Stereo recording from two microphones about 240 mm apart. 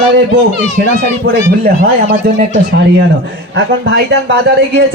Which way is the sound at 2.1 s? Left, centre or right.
Right.